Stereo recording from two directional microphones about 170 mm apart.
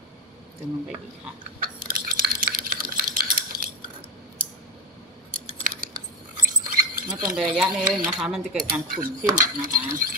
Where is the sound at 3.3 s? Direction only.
55° right (ahead or behind).